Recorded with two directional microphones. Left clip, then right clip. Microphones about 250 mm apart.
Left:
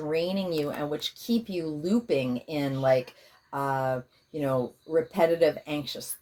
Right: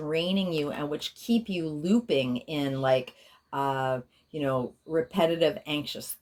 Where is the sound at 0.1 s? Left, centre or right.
Right.